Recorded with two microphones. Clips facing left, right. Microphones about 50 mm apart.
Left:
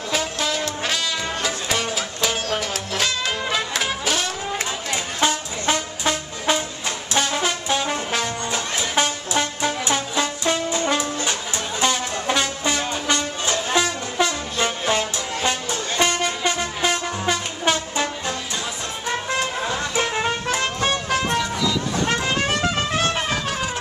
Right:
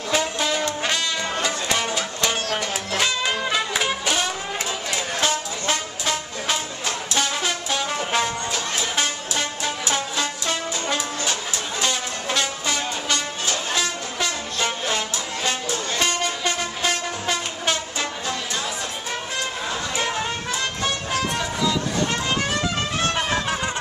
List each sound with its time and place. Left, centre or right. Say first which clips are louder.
0.1 s brass instrument: right 2 dB; centre
1.4 s music: right 1 dB; centre
5.2 s brass instrument: left 5 dB; centre
8.5 s music: left 1 dB; left
10.4 s brass instrument: left 4 dB; centre
11.8 s music: left 5 dB; centre
14.1 s brass instrument: left 4 dB; centre
16.0 s train: left 4 dB; centre
20.5 s music: left 3 dB; left